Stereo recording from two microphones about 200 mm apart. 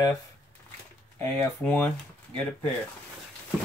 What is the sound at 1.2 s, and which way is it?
Speech, 10° left (ahead or behind).